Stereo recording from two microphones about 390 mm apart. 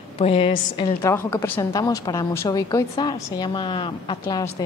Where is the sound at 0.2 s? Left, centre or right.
Centre.